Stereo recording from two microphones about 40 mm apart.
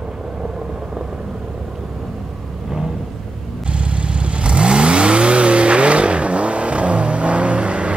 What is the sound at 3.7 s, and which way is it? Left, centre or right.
Vehicle, right.